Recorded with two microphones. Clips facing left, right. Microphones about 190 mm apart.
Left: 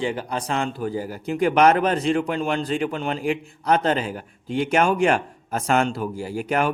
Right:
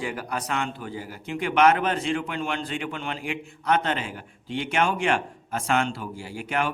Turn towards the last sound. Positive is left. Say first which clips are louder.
# left 5 dB
turn(degrees=40)  # may be behind; listen again after turning